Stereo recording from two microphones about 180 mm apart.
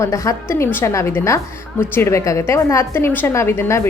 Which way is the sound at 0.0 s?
20° left (ahead or behind).